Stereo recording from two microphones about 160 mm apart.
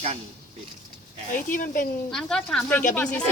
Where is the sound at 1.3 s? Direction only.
55° left (ahead or behind).